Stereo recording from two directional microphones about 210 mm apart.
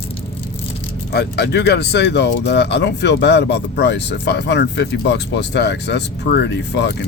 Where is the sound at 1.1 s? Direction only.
55° left (ahead or behind).